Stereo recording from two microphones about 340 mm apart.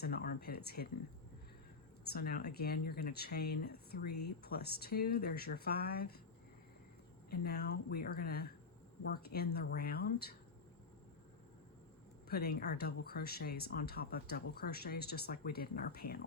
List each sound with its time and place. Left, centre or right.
0.0 s speech: left
2.1 s speech: left
7.3 s speech: left
12.3 s speech: left